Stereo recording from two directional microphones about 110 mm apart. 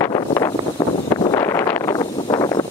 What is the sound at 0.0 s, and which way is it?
Wind noise, 30° left (ahead or behind).